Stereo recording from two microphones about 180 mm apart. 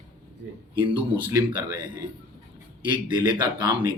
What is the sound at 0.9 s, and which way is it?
A man's voice, 25° right (ahead or behind).